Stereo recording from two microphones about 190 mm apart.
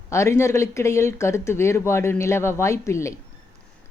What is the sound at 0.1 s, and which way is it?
Speech, 15° left (ahead or behind).